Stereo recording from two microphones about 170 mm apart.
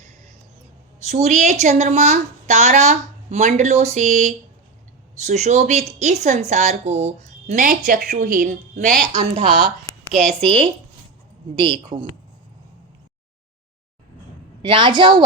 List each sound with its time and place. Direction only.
1.0 s a woman's voice: 40° right (ahead or behind)
10.4 s a woman's voice: 30° right (ahead or behind)
14.6 s a woman's voice: 25° right (ahead or behind)